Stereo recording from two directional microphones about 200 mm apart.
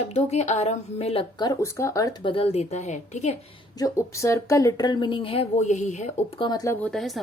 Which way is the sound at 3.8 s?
15° left (ahead or behind).